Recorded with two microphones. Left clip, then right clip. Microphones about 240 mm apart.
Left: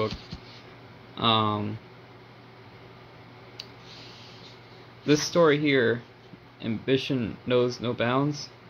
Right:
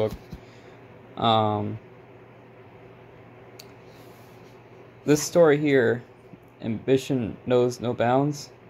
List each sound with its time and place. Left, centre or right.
1.1 s speech: centre
5.0 s speech: centre